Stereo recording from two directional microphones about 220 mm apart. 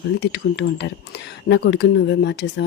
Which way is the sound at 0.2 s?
50° left (ahead or behind).